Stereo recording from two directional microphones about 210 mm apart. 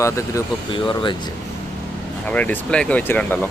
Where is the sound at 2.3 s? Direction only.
5° left (ahead or behind).